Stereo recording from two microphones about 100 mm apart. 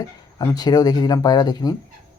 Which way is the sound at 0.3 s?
40° left (ahead or behind).